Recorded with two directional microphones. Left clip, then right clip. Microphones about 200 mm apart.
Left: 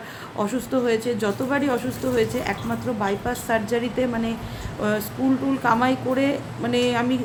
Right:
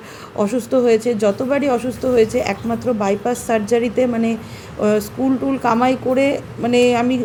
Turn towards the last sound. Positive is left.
turn(degrees=-25)  # may be behind; listen again after turning